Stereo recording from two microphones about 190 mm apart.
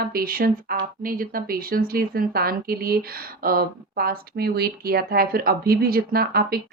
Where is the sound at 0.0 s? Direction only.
50° right (ahead or behind).